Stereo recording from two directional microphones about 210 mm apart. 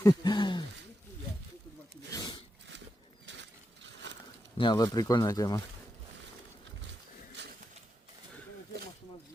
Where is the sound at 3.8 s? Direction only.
60° right (ahead or behind).